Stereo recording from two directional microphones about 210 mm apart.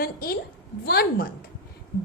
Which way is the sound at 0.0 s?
45° left (ahead or behind).